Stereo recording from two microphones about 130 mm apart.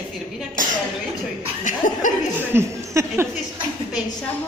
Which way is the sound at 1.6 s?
85° left.